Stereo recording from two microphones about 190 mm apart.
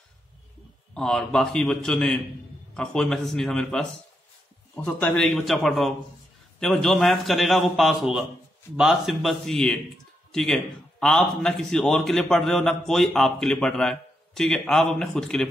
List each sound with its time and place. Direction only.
0.9 s a man's voice: 5° left (ahead or behind)